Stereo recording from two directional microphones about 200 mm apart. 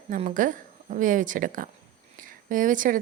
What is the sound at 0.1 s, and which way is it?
A woman's voice, 40° right (ahead or behind).